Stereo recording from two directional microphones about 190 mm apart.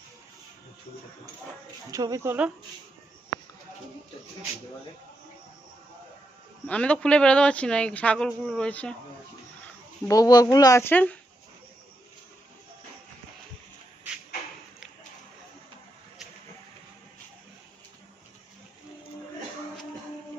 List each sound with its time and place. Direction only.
1.9 s speech: 20° right (ahead or behind)
6.7 s a man's voice: 5° left (ahead or behind)
10.1 s speech: 20° left (ahead or behind)